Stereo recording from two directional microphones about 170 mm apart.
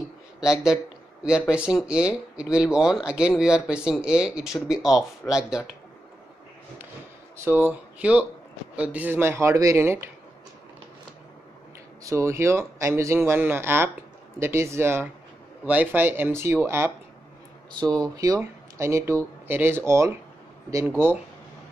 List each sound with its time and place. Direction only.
0.4 s speech: 5° right (ahead or behind)
8.0 s speech: 5° right (ahead or behind)
12.0 s speech: 20° right (ahead or behind)
18.0 s speech: 20° right (ahead or behind)